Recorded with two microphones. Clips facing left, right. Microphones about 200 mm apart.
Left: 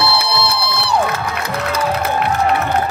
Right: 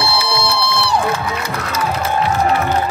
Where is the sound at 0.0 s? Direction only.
60° left (ahead or behind).